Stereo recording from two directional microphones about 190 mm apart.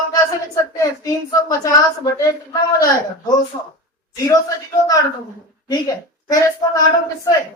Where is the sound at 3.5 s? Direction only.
20° left (ahead or behind).